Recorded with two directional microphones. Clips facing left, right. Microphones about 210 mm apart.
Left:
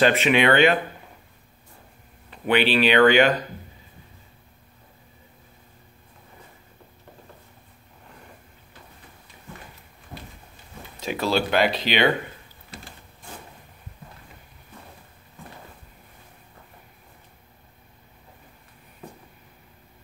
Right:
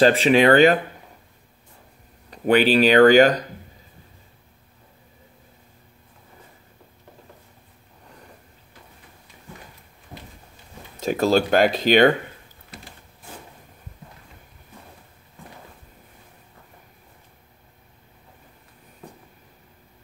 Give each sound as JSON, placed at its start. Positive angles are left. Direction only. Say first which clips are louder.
{"t": 0.0, "sound": "speech", "louder": "right 4 dB", "side_deg": -35}
{"t": 2.3, "sound": "speech", "louder": "right 4 dB", "side_deg": -40}
{"t": 11.0, "sound": "speech", "louder": "right 5 dB", "side_deg": -45}